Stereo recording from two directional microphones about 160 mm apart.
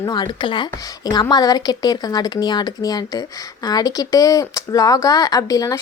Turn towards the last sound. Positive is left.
turn(degrees=20)  # may be behind; listen again after turning